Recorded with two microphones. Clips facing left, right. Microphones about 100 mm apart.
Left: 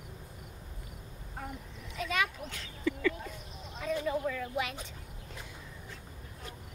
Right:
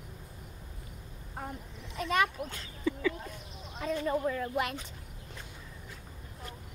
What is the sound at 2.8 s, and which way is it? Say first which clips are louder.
Speech: even; 10° right (ahead or behind).